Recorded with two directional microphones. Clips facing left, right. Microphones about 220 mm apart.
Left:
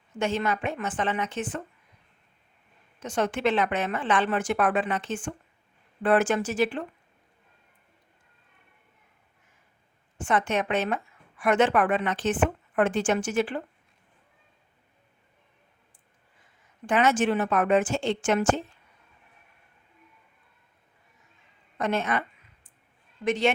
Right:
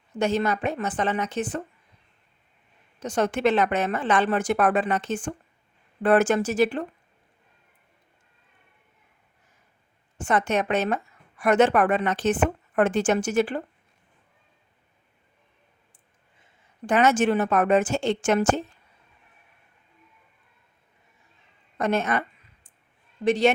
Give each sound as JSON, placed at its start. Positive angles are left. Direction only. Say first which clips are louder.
{"t": 0.1, "sound": "speech", "louder": "right 3 dB", "side_deg": -40}
{"t": 3.0, "sound": "speech", "louder": "right 3 dB", "side_deg": -40}
{"t": 10.2, "sound": "speech", "louder": "right 2 dB", "side_deg": -40}
{"t": 16.8, "sound": "speech", "louder": "right 3 dB", "side_deg": -45}
{"t": 21.8, "sound": "a woman's voice", "louder": "right 3 dB", "side_deg": -40}
{"t": 23.2, "sound": "speech", "louder": "right 4 dB", "side_deg": -35}